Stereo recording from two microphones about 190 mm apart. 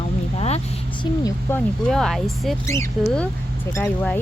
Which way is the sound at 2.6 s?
15° left (ahead or behind).